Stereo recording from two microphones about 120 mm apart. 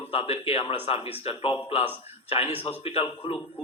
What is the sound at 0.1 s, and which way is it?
A man's voice, 55° left (ahead or behind).